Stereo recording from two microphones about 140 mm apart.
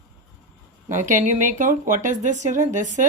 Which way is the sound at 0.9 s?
65° right (ahead or behind).